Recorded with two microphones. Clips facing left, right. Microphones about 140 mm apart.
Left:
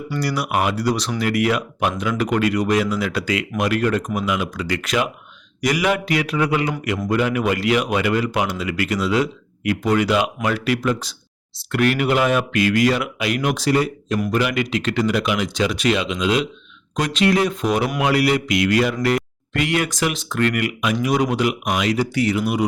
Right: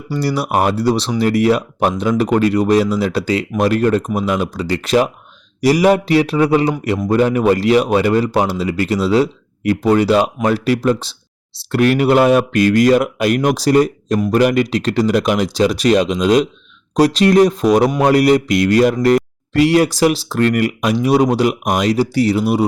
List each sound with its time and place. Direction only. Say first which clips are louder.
0.1 s speech: right 5 dB; 30° right (ahead or behind)